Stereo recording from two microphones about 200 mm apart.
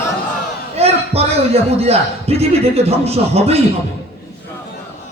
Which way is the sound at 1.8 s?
30° right (ahead or behind).